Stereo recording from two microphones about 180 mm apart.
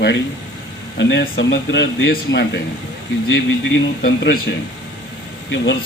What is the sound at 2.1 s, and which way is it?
Speech, 60° left (ahead or behind).